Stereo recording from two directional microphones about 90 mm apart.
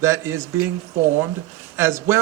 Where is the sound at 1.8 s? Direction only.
30° right (ahead or behind).